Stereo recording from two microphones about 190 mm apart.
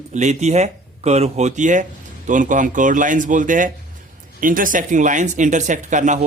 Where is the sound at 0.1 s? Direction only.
40° right (ahead or behind).